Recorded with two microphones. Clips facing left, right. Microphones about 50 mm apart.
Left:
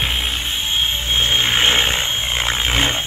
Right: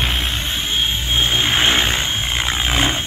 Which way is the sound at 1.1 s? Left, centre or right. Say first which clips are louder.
Even; left.